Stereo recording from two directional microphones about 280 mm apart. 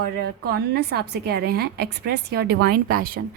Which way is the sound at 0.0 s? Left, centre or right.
Right.